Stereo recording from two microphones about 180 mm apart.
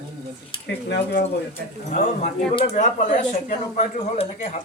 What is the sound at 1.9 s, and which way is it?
Speech, 45° left (ahead or behind).